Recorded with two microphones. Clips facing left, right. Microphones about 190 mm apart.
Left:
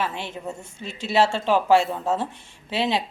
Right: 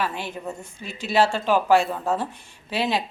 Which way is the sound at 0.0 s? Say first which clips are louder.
Even; 25° left (ahead or behind).